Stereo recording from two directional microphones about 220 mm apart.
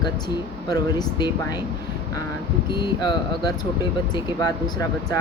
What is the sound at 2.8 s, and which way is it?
Speech, 20° left (ahead or behind).